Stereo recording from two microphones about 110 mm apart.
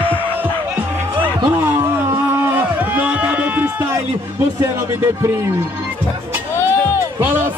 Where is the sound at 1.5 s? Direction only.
20° right (ahead or behind).